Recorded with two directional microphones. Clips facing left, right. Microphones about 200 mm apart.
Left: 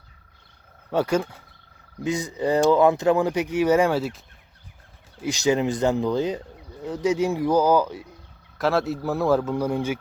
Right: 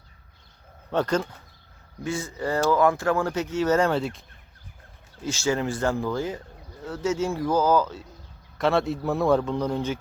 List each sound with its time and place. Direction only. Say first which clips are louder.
0.9 s speech: left 2 dB; 10° left (ahead or behind)
5.2 s speech: left 4 dB; 15° left (ahead or behind)
8.5 s speech: even; centre (ahead or behind)